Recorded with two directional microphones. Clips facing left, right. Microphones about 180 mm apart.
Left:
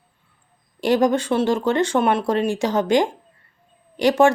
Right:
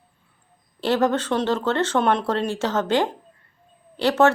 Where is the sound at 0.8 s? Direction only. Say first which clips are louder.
Left 3 dB; 15° left (ahead or behind).